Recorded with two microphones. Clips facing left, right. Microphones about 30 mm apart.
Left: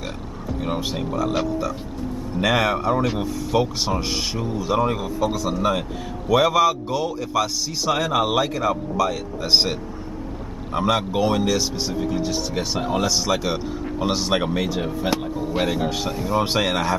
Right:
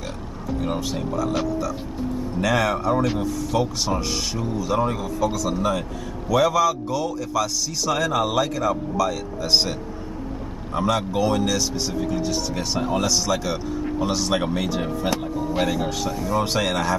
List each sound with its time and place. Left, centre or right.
0.7 s a man's voice: centre
2.4 s a man's voice: centre
15.7 s a man's voice: left